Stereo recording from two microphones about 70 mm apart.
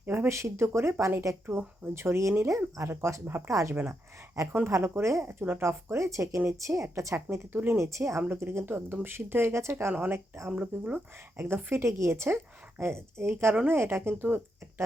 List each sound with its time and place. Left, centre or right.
0.0 s a sound: right
0.3 s a woman's voice: right
3.5 s speech: right
4.7 s a woman's voice: right
7.8 s a woman's voice: right
9.9 s speech: right
11.3 s a woman's voice: right